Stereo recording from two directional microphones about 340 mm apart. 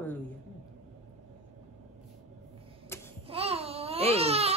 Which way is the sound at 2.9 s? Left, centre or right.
Centre.